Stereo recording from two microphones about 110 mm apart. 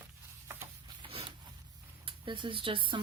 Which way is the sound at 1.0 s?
55° right (ahead or behind).